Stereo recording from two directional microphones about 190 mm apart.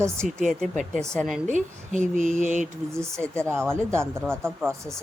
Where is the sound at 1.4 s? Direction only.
40° right (ahead or behind).